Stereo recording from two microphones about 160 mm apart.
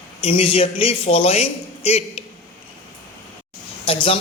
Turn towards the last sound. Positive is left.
turn(degrees=35)  # may be behind; listen again after turning